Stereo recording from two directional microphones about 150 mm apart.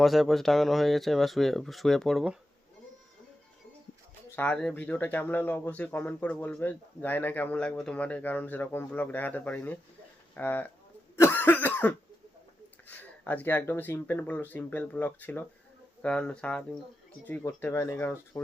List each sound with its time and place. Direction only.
0.0 s speech: centre (ahead or behind)
4.4 s speech: 5° left (ahead or behind)
11.2 s cough: 15° left (ahead or behind)
12.9 s speech: 10° left (ahead or behind)